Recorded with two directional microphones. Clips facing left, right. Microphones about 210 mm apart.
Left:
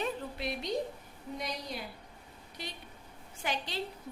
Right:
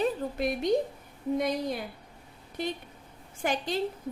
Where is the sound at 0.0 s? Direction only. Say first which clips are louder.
Right 7 dB; 50° right (ahead or behind).